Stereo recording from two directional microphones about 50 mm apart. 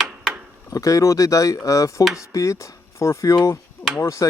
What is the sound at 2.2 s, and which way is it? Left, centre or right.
Speech, left.